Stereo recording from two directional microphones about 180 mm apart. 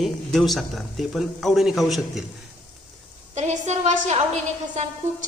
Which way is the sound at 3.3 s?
40° right (ahead or behind).